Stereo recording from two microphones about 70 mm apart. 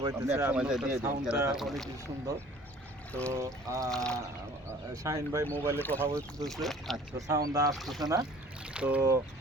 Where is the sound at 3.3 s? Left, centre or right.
Right.